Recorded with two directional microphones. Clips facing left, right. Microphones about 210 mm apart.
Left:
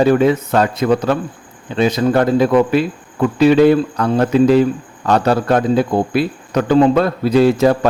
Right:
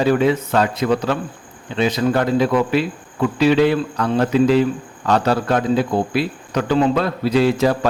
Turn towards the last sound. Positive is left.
turn(degrees=45)  # may be behind; listen again after turning